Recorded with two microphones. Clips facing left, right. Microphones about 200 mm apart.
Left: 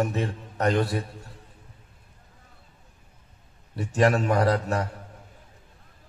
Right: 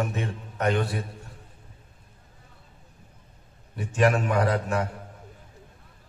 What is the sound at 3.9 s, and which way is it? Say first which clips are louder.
Speech: left 1 dB; 35° left (ahead or behind).